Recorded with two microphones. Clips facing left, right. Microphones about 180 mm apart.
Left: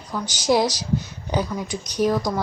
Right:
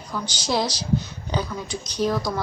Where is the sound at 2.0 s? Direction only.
15° left (ahead or behind).